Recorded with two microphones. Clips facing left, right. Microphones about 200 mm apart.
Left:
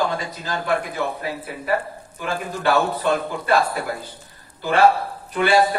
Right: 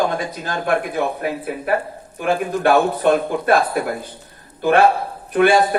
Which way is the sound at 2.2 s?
55° right (ahead or behind).